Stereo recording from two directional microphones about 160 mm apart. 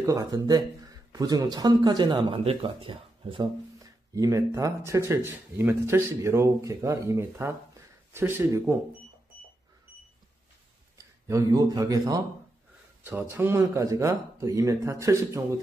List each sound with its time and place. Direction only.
0.0 s speech: 20° right (ahead or behind)
3.8 s speech: 20° right (ahead or behind)
11.0 s speech: 20° right (ahead or behind)